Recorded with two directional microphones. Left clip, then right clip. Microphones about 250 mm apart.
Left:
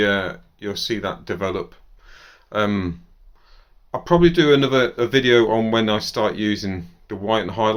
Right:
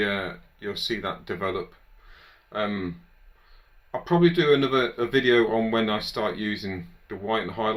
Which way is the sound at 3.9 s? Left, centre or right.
Left.